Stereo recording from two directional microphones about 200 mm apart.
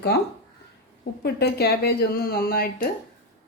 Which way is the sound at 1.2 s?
50° left (ahead or behind).